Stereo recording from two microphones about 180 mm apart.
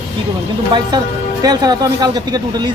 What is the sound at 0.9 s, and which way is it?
Speech, 20° right (ahead or behind).